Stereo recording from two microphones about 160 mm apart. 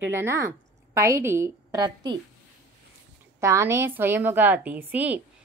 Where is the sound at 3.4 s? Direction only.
15° right (ahead or behind).